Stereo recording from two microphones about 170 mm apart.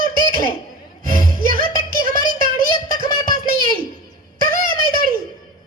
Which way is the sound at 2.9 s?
55° right (ahead or behind).